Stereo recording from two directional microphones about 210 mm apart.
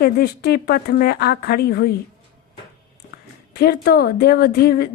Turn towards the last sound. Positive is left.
turn(degrees=45)  # may be behind; listen again after turning